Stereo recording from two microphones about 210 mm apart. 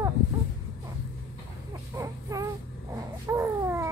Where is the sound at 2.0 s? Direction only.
15° right (ahead or behind).